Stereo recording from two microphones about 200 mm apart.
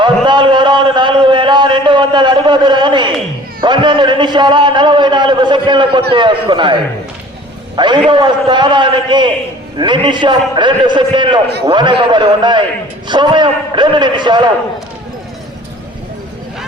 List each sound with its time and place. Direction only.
0.0 s a sound: 25° right (ahead or behind)
3.6 s a man's voice: 25° right (ahead or behind)
7.8 s a man's voice: 25° right (ahead or behind)